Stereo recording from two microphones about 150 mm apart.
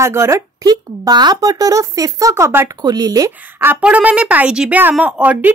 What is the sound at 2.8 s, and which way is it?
A woman's voice, 25° right (ahead or behind).